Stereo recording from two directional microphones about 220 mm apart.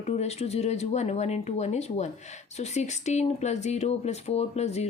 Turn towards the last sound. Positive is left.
turn(degrees=30)  # may be behind; listen again after turning